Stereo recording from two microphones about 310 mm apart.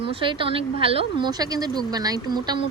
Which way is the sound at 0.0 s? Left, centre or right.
Centre.